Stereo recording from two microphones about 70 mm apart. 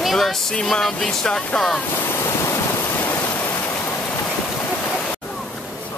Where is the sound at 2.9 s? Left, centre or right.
Left.